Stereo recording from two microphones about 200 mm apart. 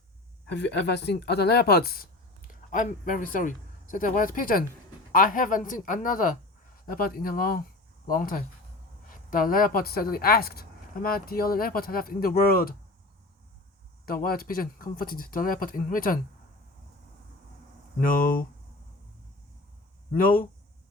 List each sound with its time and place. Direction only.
0.4 s a woman's voice: 60° left (ahead or behind)
14.0 s a woman's voice: 45° left (ahead or behind)
18.0 s a woman's voice: 45° left (ahead or behind)
20.1 s a woman's voice: 45° left (ahead or behind)